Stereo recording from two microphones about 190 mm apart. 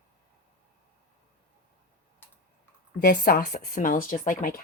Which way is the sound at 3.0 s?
50° left (ahead or behind).